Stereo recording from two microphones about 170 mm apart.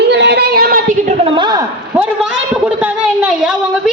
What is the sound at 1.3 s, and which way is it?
Speech, 25° right (ahead or behind).